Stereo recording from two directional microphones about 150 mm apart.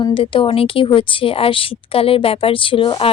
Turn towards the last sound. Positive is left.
turn(degrees=35)  # may be behind; listen again after turning